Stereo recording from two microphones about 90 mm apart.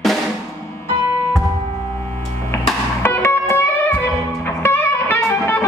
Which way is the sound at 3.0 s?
25° left (ahead or behind).